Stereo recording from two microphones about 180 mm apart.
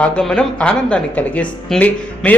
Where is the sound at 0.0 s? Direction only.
5° left (ahead or behind).